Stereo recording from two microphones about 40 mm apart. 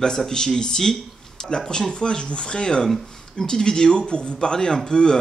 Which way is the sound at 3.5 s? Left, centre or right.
Centre.